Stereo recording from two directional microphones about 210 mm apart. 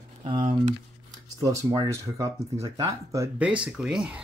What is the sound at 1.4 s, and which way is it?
Speech, 20° right (ahead or behind).